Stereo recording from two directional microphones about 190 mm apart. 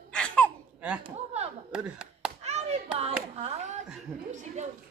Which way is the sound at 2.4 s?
35° right (ahead or behind).